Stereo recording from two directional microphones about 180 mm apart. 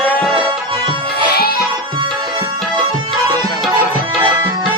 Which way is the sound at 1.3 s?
60° left (ahead or behind).